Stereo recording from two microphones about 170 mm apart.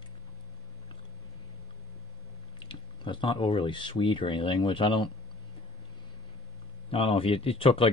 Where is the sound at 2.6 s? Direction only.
30° left (ahead or behind).